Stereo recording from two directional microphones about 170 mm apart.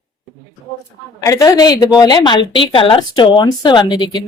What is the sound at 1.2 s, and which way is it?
A woman's voice, 20° left (ahead or behind).